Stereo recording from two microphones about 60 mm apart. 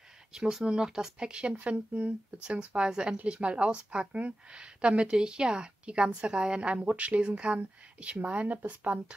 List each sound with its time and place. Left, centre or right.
0.3 s a woman's voice: centre